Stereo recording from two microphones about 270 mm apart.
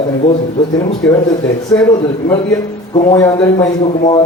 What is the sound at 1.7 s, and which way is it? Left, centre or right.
A man's voice, centre.